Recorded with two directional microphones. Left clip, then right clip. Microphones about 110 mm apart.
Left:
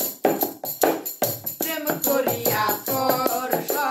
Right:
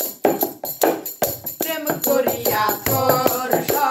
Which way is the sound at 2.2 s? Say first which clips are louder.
Right 3 dB; 20° left (ahead or behind).